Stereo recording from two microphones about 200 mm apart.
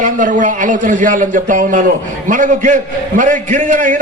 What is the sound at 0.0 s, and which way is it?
A man's voice, 40° right (ahead or behind).